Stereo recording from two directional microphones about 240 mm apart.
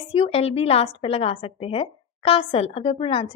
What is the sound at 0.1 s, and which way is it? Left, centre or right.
A woman's voice, left.